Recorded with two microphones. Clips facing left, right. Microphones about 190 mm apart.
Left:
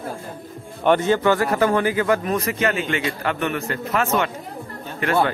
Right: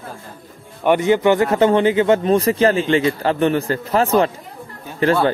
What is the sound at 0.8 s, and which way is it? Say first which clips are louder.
Speech: right 3 dB; 15° right (ahead or behind).